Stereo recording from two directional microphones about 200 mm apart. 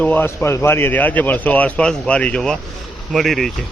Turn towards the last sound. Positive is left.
turn(degrees=0)  # may be behind; listen again after turning